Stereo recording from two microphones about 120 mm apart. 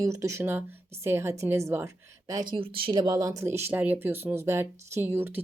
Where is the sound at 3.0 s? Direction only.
30° right (ahead or behind).